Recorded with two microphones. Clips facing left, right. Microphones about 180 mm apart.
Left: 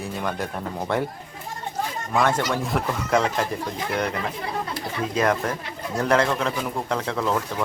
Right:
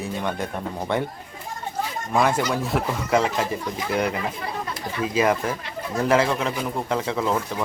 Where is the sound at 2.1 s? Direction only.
10° right (ahead or behind).